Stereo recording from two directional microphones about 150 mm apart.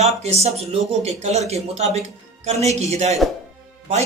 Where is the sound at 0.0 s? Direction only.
45° right (ahead or behind).